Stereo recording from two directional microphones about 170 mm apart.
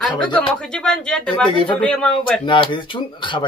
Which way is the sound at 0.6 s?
5° left (ahead or behind).